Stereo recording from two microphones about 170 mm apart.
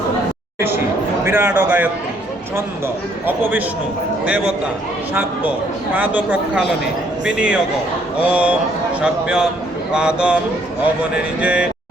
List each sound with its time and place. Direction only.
1.2 s speech: 15° right (ahead or behind)
5.9 s a man's voice: 10° right (ahead or behind)